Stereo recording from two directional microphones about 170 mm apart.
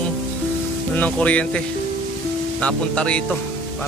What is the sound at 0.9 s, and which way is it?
A man's voice, 10° left (ahead or behind).